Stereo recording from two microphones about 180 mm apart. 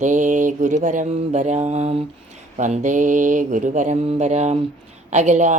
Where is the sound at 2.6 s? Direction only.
45° right (ahead or behind).